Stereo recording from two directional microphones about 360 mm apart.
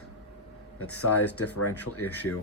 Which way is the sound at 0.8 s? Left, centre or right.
Left.